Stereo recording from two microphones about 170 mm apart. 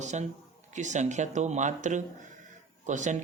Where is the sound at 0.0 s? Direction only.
45° right (ahead or behind).